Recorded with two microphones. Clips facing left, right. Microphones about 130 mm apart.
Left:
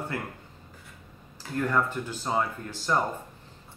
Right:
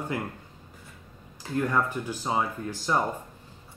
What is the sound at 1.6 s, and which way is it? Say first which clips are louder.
Speech: even; 10° right (ahead or behind).